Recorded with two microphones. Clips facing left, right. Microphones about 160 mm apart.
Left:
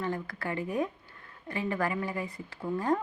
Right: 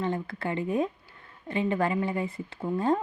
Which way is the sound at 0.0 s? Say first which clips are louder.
Right 4 dB; 25° right (ahead or behind).